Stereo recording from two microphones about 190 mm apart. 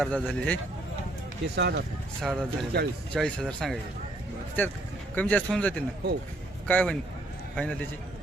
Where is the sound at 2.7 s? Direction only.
60° right (ahead or behind).